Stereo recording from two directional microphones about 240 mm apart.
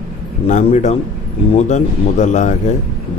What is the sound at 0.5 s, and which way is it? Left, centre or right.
Speech, left.